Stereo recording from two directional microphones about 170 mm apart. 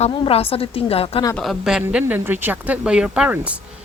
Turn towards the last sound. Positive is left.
turn(degrees=-5)  # may be behind; listen again after turning